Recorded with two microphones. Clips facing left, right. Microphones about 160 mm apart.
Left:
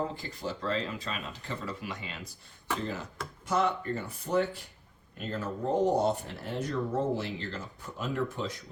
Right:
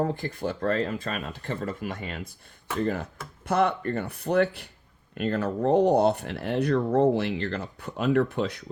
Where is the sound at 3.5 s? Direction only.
65° right (ahead or behind).